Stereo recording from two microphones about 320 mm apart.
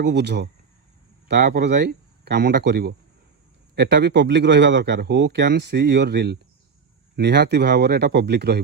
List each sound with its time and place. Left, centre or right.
0.0 s speech: right